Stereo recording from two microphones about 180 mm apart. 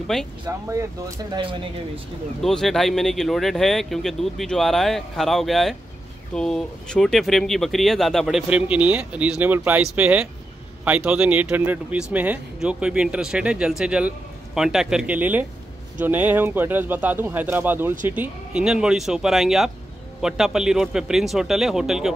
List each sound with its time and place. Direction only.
0.1 s speech: 5° left (ahead or behind)
0.5 s speech: 15° right (ahead or behind)
1.4 s speech: 30° right (ahead or behind)
2.4 s speech: centre (ahead or behind)